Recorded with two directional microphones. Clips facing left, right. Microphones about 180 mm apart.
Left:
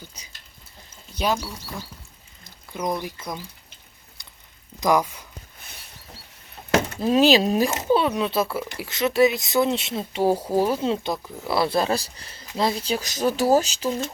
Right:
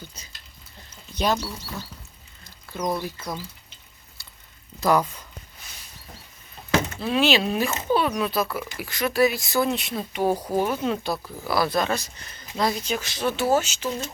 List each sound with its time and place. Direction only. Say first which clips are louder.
0.1 s a sound: right 1 dB; 15° left (ahead or behind)
1.1 s speech: even; 10° left (ahead or behind)
2.6 s speech: even; 15° left (ahead or behind)
4.8 s speech: even; 10° left (ahead or behind)
5.5 s a sound: left 1 dB; 60° left (ahead or behind)
6.9 s speech: left 6 dB; 40° left (ahead or behind)
7.9 s speech: even; 25° left (ahead or behind)
10.3 s speech: left 2 dB; 5° left (ahead or behind)
10.6 s speech: left 2 dB; 30° left (ahead or behind)